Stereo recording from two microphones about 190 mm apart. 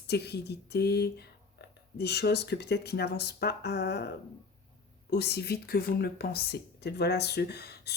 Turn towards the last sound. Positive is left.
turn(degrees=60)  # may be behind; listen again after turning